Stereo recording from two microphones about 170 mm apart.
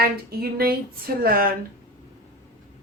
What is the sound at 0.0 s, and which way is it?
A woman's voice, 60° right (ahead or behind).